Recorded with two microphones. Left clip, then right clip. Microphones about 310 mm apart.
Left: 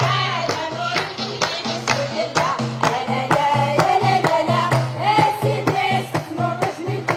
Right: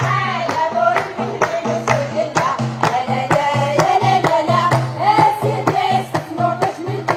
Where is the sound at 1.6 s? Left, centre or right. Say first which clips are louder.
Right 4 dB; right.